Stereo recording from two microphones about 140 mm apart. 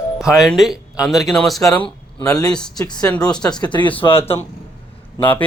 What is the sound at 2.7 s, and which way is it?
Speech, 30° left (ahead or behind).